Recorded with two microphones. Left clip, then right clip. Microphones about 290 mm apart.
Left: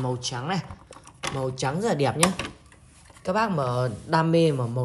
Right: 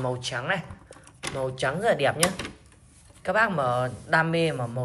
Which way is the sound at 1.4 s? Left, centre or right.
Centre.